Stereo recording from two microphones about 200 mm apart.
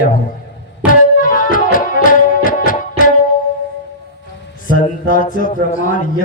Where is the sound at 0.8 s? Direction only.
5° right (ahead or behind).